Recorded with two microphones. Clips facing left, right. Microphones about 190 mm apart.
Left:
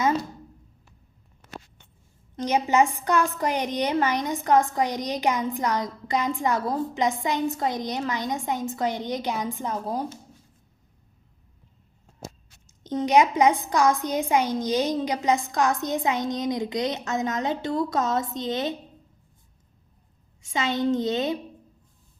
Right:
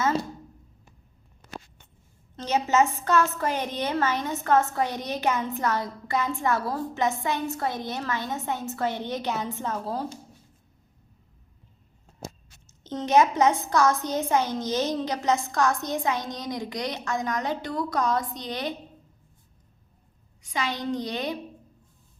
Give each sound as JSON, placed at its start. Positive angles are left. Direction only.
{"t": 2.3, "sound": "a woman's voice", "side_deg": 15}
{"t": 12.6, "sound": "a woman's voice", "side_deg": 15}
{"t": 20.4, "sound": "a woman's voice", "side_deg": 25}